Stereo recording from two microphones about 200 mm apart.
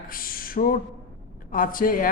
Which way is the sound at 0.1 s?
45° left (ahead or behind).